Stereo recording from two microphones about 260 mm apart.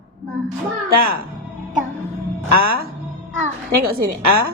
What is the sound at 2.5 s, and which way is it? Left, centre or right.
Speech, right.